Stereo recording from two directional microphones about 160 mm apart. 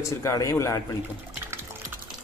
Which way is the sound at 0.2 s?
20° left (ahead or behind).